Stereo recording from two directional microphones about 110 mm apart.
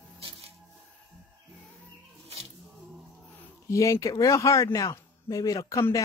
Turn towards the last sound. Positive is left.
turn(degrees=30)  # may be behind; listen again after turning